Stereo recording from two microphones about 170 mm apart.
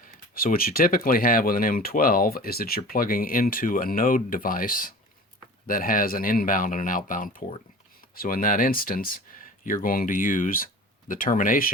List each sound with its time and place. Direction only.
0.3 s speech: 55° left (ahead or behind)